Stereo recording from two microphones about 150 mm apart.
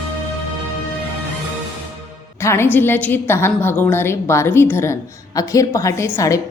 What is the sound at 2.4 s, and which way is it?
A woman's voice, 15° left (ahead or behind).